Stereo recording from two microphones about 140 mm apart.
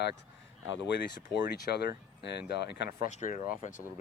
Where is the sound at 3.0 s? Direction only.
65° left (ahead or behind).